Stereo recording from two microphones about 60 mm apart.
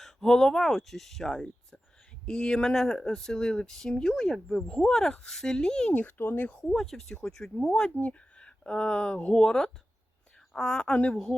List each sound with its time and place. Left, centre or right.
0.0 s speech: centre
5.9 s speech: left
6.6 s speech: centre